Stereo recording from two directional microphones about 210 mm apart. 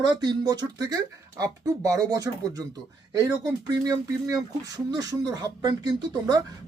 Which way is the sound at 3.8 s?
15° right (ahead or behind).